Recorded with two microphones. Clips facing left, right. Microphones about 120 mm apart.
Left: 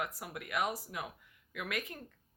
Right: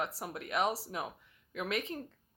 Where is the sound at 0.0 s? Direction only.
30° right (ahead or behind).